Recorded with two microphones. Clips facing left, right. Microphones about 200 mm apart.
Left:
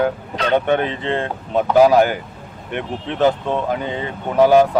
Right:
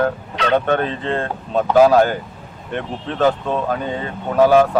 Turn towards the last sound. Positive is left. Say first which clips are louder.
# even
turn(degrees=15)  # may be behind; listen again after turning